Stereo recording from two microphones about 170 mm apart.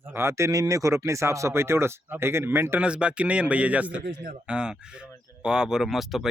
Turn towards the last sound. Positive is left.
turn(degrees=0)  # may be behind; listen again after turning